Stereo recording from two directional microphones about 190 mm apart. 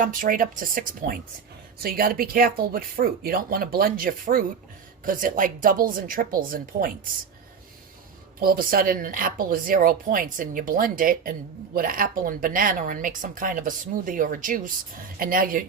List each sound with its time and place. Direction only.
0.0 s speech: 45° right (ahead or behind)
8.4 s speech: 50° right (ahead or behind)